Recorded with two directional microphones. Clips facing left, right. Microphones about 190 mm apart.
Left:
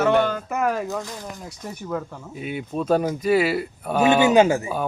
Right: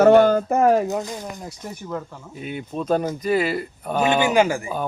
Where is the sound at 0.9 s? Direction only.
20° right (ahead or behind).